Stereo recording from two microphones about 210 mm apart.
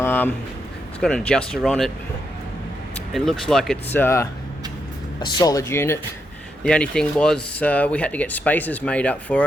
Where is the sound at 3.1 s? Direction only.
Centre (ahead or behind).